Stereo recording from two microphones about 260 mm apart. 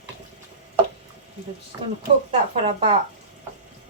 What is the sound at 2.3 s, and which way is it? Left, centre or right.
Speech, right.